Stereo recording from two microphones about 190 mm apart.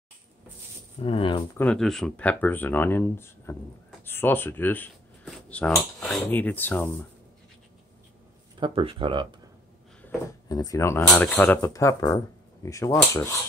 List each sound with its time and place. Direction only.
1.0 s speech: 30° left (ahead or behind)
1.6 s speech: 5° left (ahead or behind)
8.5 s speech: 25° right (ahead or behind)
10.0 s speech: 20° left (ahead or behind)
11.1 s speech: 5° left (ahead or behind)